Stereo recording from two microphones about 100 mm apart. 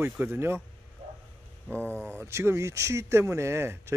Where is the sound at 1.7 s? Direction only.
15° left (ahead or behind).